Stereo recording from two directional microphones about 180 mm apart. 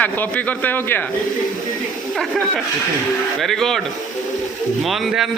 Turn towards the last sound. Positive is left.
turn(degrees=0)  # may be behind; listen again after turning